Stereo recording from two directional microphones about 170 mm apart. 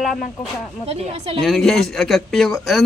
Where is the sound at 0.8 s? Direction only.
35° right (ahead or behind).